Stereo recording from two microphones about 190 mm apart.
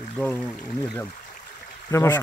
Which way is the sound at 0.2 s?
5° left (ahead or behind).